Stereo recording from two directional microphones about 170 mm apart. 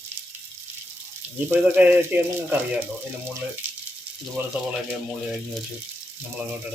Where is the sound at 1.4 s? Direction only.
10° right (ahead or behind).